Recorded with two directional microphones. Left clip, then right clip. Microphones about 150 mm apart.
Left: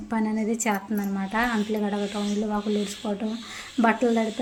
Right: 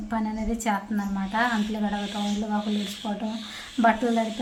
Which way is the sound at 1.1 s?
25° left (ahead or behind).